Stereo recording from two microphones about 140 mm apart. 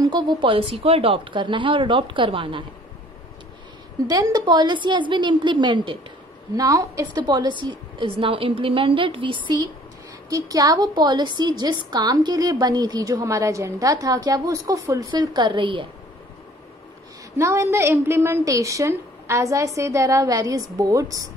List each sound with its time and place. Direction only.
0.0 s speech: 30° right (ahead or behind)
4.1 s speech: 30° right (ahead or behind)
6.5 s a woman's voice: 25° right (ahead or behind)
17.4 s a woman's voice: 20° right (ahead or behind)